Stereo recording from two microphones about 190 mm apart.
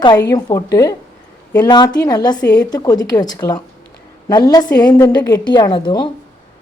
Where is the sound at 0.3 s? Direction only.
20° left (ahead or behind).